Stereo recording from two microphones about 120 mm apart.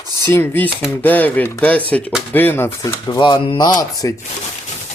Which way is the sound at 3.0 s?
40° left (ahead or behind).